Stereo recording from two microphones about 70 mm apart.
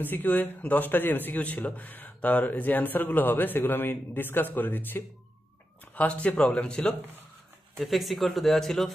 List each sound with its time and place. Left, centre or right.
0.0 s speech: left
7.8 s speech: centre